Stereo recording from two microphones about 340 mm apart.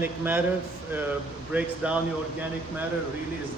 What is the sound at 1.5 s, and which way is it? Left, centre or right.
Speech, centre.